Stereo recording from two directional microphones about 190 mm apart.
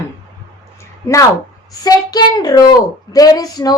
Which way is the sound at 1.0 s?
15° left (ahead or behind).